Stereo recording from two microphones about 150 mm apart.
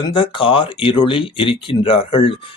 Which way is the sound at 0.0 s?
35° left (ahead or behind).